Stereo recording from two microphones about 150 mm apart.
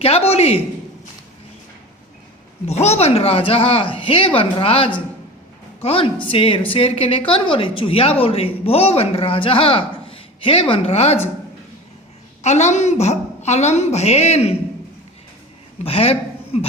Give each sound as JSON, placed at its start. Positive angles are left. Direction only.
{"t": 0.0, "sound": "a woman's voice", "side_deg": 40}
{"t": 2.6, "sound": "a woman's voice", "side_deg": 45}
{"t": 12.4, "sound": "a woman's voice", "side_deg": 50}
{"t": 15.8, "sound": "speech", "side_deg": 40}